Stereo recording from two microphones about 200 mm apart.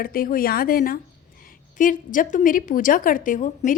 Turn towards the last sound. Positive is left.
turn(degrees=40)  # may be behind; listen again after turning